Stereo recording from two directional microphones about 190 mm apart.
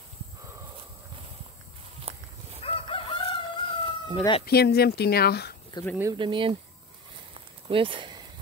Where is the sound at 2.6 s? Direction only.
30° left (ahead or behind).